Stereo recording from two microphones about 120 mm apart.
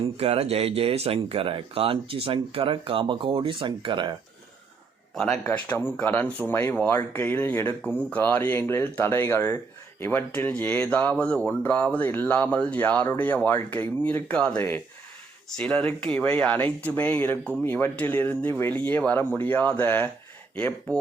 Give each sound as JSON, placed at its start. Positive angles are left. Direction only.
{"t": 0.2, "sound": "speech", "side_deg": -60}
{"t": 5.1, "sound": "speech", "side_deg": 5}
{"t": 5.5, "sound": "speech", "side_deg": 20}